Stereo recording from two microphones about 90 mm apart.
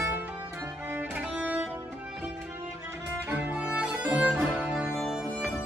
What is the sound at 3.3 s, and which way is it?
Music, 10° right (ahead or behind).